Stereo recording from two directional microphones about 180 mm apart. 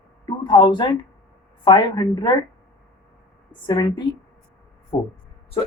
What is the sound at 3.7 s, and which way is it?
Speech, 25° left (ahead or behind).